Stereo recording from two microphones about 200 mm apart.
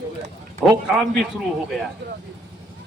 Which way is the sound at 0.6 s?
5° right (ahead or behind).